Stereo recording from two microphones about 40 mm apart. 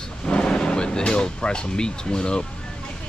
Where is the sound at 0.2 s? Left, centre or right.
Left.